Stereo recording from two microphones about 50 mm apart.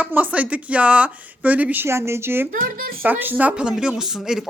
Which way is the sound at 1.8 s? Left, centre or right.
Right.